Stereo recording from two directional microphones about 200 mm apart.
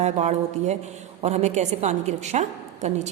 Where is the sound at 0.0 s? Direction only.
35° right (ahead or behind).